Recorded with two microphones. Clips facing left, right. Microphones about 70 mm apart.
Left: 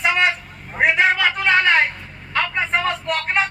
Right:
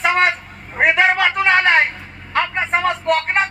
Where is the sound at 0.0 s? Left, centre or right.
Right.